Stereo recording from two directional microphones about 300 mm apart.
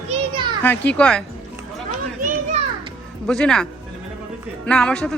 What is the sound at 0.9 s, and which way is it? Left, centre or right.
Speech, centre.